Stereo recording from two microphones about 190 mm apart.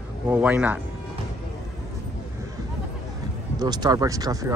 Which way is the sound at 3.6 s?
20° right (ahead or behind).